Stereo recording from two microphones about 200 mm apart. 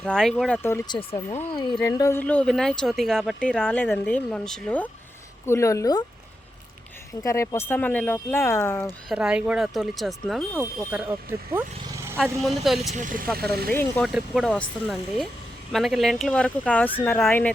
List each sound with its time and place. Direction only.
0.0 s speech: 5° left (ahead or behind)
0.9 s speech: 25° left (ahead or behind)
7.2 s speech: 15° left (ahead or behind)
9.0 s speech: 5° right (ahead or behind)
12.1 s speech: centre (ahead or behind)
12.9 s speech: 40° right (ahead or behind)
13.4 s speech: 50° right (ahead or behind)
13.7 s speech: 10° left (ahead or behind)
14.1 s speech: 5° right (ahead or behind)
15.7 s speech: centre (ahead or behind)